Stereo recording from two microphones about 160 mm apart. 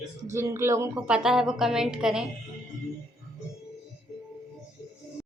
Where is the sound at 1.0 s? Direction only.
5° right (ahead or behind).